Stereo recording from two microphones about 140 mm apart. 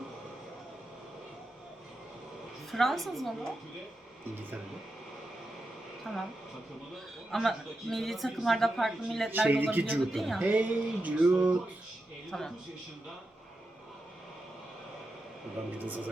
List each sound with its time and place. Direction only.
2.7 s a woman's voice: centre (ahead or behind)
6.1 s a woman's voice: centre (ahead or behind)
7.3 s a woman's voice: centre (ahead or behind)
9.3 s male singing: 10° right (ahead or behind)
10.1 s a woman's voice: centre (ahead or behind)
10.4 s male singing: 10° right (ahead or behind)
12.3 s a woman's voice: 5° left (ahead or behind)
15.6 s a woman's voice: 5° right (ahead or behind)